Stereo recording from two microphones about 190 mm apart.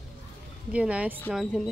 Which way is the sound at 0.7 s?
5° right (ahead or behind).